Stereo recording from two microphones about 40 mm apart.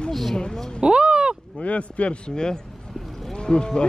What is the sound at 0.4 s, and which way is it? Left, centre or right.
Speech, centre.